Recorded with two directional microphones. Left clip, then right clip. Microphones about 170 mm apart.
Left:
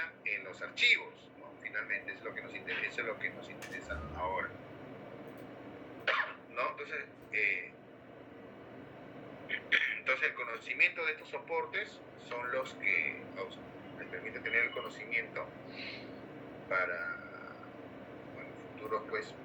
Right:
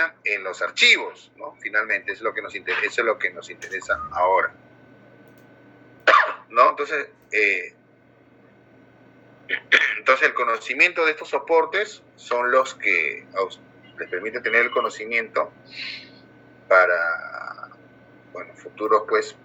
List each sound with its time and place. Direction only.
0.0 s a man's voice: 60° right (ahead or behind)
6.1 s speech: 60° right (ahead or behind)
9.5 s a man's voice: 65° right (ahead or behind)
18.8 s a man's voice: 60° right (ahead or behind)